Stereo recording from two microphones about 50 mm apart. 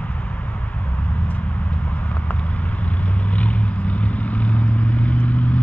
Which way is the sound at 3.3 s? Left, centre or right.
Left.